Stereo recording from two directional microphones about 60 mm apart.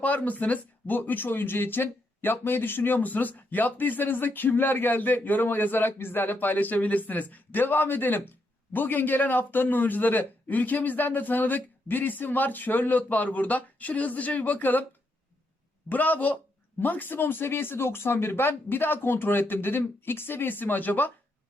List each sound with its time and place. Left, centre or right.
0.0 s a man's voice: left
15.9 s a man's voice: left